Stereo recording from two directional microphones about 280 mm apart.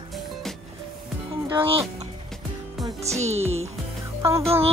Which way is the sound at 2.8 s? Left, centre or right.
Right.